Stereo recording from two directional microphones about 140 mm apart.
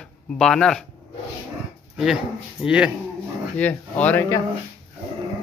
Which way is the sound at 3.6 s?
10° left (ahead or behind).